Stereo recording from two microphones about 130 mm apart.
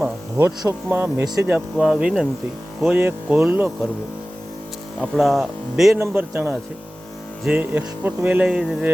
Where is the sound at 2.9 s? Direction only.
15° right (ahead or behind).